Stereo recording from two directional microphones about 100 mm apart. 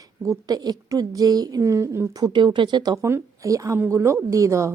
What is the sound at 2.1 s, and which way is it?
Speech, 45° right (ahead or behind).